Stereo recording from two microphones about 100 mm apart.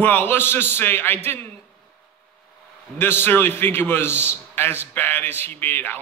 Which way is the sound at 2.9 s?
20° left (ahead or behind).